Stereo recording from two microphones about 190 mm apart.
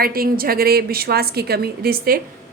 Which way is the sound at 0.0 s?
50° right (ahead or behind).